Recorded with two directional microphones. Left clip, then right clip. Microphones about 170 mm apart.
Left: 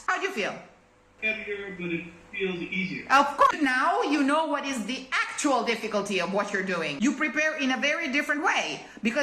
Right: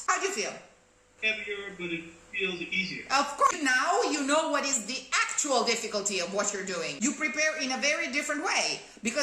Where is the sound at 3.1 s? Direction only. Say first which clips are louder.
Left 6 dB; 10° right (ahead or behind).